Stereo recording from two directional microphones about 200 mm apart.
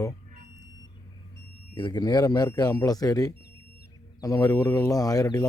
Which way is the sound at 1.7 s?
20° left (ahead or behind).